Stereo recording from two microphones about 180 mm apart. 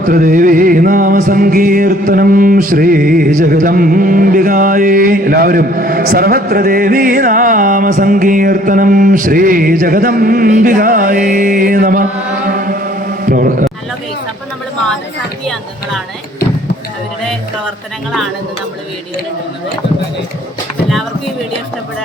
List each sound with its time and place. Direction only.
0.0 s music: 50° right (ahead or behind)